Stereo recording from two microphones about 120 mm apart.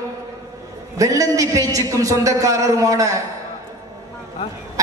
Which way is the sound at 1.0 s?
30° right (ahead or behind).